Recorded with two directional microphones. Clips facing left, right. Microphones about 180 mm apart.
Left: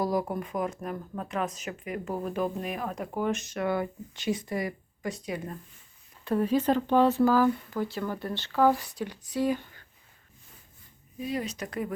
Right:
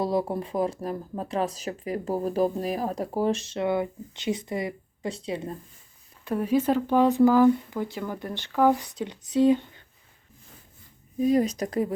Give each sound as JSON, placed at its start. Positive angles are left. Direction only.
{"t": 0.0, "sound": "speech", "side_deg": -30}
{"t": 6.2, "sound": "speech", "side_deg": -10}
{"t": 11.2, "sound": "speech", "side_deg": -40}